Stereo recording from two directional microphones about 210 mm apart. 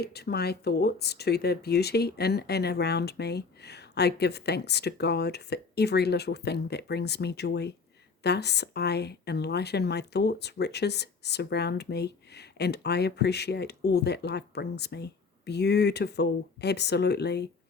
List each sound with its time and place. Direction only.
0.0 s a woman's voice: 50° left (ahead or behind)